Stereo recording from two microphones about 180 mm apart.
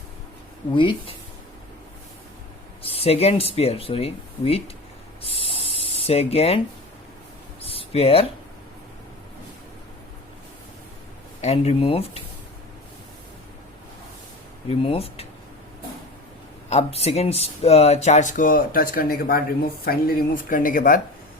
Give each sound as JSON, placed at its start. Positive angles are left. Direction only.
{"t": 0.7, "sound": "speech", "side_deg": 25}
{"t": 2.8, "sound": "speech", "side_deg": 35}
{"t": 5.2, "sound": "spray", "side_deg": 30}
{"t": 7.6, "sound": "a sound", "side_deg": 35}
{"t": 11.3, "sound": "speech", "side_deg": 35}
{"t": 14.7, "sound": "speech", "side_deg": 35}
{"t": 16.6, "sound": "speech", "side_deg": 35}